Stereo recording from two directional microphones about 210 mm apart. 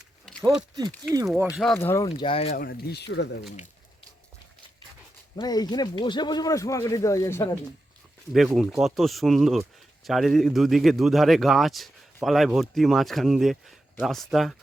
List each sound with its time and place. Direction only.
1.3 s speech: 5° right (ahead or behind)
1.7 s speech: 10° left (ahead or behind)
2.0 s speech: 25° left (ahead or behind)
2.6 s speech: 50° left (ahead or behind)
5.4 s speech: 20° left (ahead or behind)
8.5 s speech: centre (ahead or behind)